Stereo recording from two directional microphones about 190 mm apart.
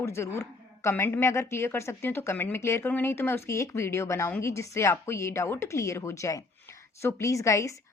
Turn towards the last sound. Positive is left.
turn(degrees=15)  # may be behind; listen again after turning